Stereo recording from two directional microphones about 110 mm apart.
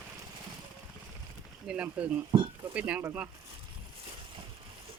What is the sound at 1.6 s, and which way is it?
Speech, 10° right (ahead or behind).